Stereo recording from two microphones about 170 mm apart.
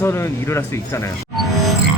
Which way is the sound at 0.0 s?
15° left (ahead or behind).